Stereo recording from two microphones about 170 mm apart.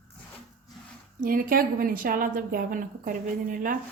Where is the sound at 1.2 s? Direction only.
55° right (ahead or behind).